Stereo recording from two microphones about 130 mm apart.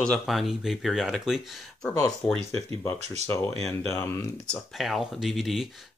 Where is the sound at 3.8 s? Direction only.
20° left (ahead or behind).